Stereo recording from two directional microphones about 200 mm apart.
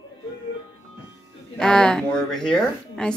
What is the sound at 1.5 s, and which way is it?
A woman's voice, 5° left (ahead or behind).